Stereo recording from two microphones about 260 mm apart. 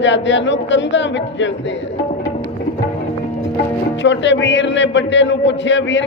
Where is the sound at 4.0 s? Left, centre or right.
Left.